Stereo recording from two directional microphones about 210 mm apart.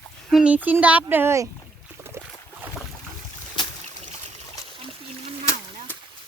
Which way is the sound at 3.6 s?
20° left (ahead or behind).